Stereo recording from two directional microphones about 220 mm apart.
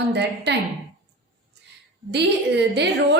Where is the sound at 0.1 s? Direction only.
50° right (ahead or behind).